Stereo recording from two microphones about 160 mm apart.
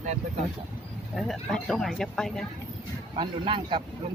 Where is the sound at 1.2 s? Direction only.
Centre (ahead or behind).